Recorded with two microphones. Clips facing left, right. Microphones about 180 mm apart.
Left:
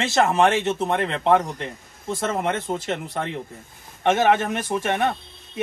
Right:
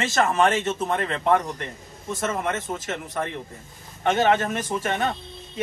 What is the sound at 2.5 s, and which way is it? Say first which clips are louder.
Speech: left 3 dB; 30° left (ahead or behind).